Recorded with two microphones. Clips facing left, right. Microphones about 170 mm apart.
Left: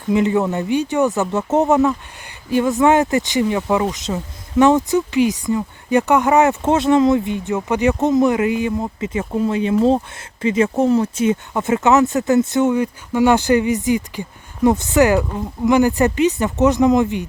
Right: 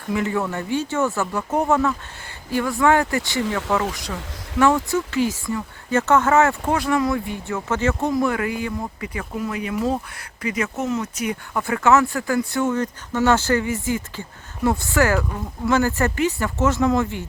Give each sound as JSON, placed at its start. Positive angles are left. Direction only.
{"t": 0.1, "sound": "speech", "side_deg": 20}